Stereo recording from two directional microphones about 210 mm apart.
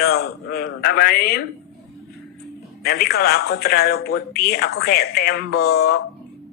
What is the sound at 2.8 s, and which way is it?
A man's voice, 50° left (ahead or behind).